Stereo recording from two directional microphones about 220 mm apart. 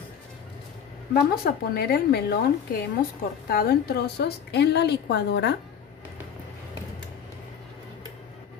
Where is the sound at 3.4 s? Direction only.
45° left (ahead or behind).